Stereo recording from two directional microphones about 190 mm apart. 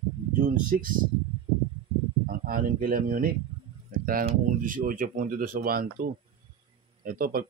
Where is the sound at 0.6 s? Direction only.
45° right (ahead or behind).